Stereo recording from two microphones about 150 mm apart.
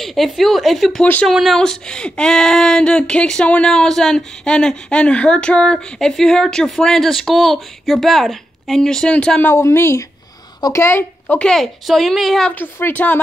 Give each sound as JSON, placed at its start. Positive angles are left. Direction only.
{"t": 0.0, "sound": "speech", "side_deg": 0}
{"t": 1.0, "sound": "a woman's voice", "side_deg": 10}
{"t": 1.3, "sound": "a woman's voice", "side_deg": 0}
{"t": 12.5, "sound": "a woman's voice", "side_deg": 15}